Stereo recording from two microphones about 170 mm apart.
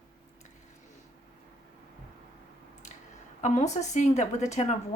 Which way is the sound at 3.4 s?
45° left (ahead or behind).